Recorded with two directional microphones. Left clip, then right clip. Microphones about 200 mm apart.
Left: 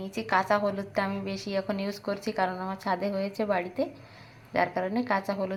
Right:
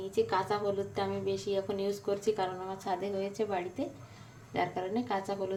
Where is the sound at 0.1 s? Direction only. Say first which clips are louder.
Left 5 dB; 20° left (ahead or behind).